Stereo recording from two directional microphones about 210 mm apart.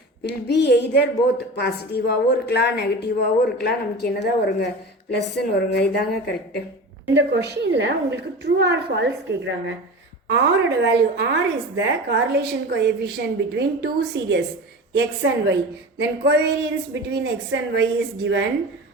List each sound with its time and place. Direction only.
0.4 s a woman's voice: 50° left (ahead or behind)
7.1 s a woman's voice: 60° right (ahead or behind)